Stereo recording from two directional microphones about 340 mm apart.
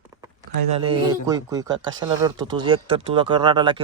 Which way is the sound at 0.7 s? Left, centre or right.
Centre.